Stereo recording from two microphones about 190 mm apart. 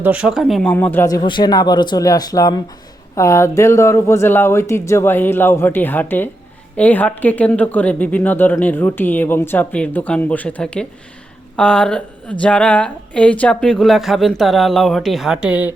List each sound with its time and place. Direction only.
0.0 s speech: 5° right (ahead or behind)